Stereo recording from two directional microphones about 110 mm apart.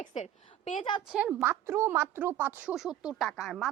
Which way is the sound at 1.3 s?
20° right (ahead or behind).